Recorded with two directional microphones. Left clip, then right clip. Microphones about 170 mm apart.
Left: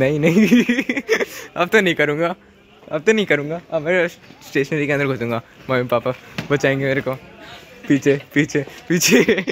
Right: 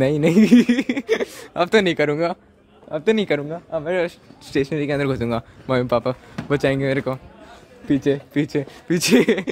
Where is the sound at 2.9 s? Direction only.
5° right (ahead or behind).